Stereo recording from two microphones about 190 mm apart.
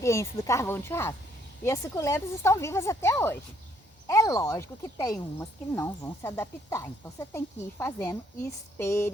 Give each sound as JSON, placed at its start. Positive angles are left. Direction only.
{"t": 0.0, "sound": "speech", "side_deg": 15}